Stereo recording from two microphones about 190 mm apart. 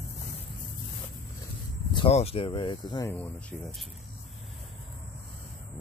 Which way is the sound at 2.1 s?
30° left (ahead or behind).